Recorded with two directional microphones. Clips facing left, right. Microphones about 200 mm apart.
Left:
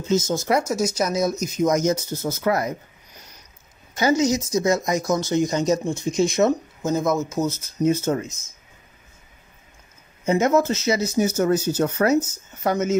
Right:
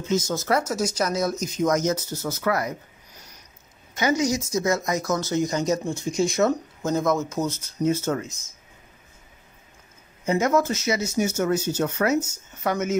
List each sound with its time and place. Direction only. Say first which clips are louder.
0.4 s speech: left 2 dB; 15° left (ahead or behind)
3.9 s speech: left 3 dB; 30° left (ahead or behind)
6.8 s speech: even; 5° left (ahead or behind)
7.8 s speech: left 3 dB; 20° left (ahead or behind)
10.2 s speech: left 3 dB; 25° left (ahead or behind)